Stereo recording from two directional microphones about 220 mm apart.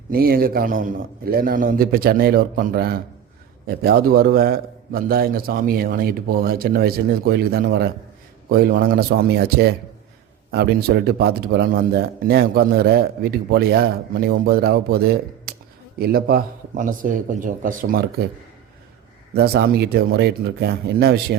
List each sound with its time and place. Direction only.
0.1 s a man's voice: 40° right (ahead or behind)
15.5 s a sound: 45° right (ahead or behind)
16.0 s a man's voice: 45° right (ahead or behind)
19.3 s a man's voice: 45° right (ahead or behind)